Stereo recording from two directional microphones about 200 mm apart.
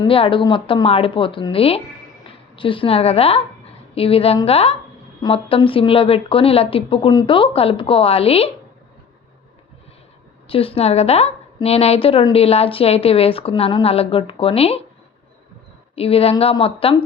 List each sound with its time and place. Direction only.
0.0 s a woman's voice: 25° left (ahead or behind)
10.5 s a woman's voice: 30° left (ahead or behind)
16.0 s a woman's voice: 30° left (ahead or behind)